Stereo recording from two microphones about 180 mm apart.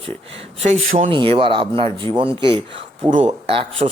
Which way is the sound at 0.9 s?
30° right (ahead or behind).